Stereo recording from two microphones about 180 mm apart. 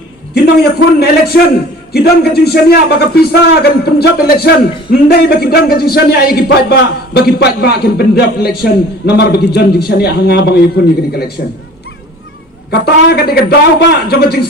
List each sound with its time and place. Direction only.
0.3 s a man's voice: 60° left (ahead or behind)
12.7 s a man's voice: 60° left (ahead or behind)